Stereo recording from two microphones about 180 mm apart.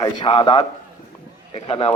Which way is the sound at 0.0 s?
25° left (ahead or behind).